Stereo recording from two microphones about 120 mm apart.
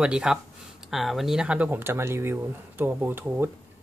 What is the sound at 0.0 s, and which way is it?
Speech, 5° right (ahead or behind).